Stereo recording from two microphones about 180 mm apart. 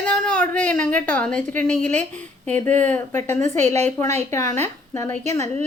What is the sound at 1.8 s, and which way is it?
Speech, 40° right (ahead or behind).